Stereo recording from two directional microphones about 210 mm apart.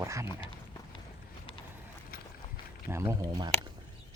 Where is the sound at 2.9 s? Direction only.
15° right (ahead or behind).